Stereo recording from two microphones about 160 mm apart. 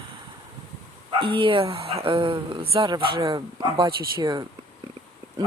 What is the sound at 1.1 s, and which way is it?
Speech, 35° right (ahead or behind).